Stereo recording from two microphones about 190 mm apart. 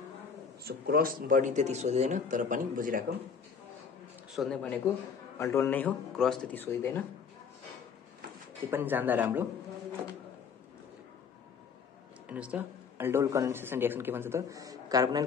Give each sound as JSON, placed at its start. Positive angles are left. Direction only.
{"t": 0.7, "sound": "speech", "side_deg": -55}
{"t": 4.4, "sound": "speech", "side_deg": 0}
{"t": 5.4, "sound": "speech", "side_deg": 15}
{"t": 8.6, "sound": "speech", "side_deg": -10}
{"t": 12.3, "sound": "speech", "side_deg": -5}